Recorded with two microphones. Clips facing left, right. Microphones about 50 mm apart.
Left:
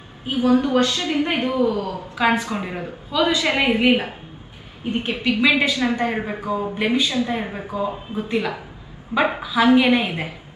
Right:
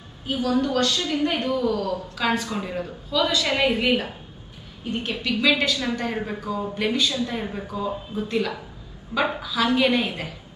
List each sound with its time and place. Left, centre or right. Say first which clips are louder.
0.2 s a woman's voice: left 5 dB; left